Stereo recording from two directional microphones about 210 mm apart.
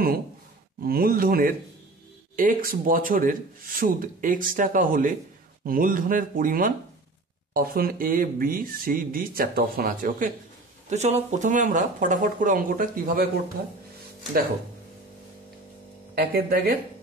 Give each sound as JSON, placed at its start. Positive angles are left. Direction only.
{"t": 0.8, "sound": "speech", "side_deg": -45}
{"t": 16.2, "sound": "speech", "side_deg": -45}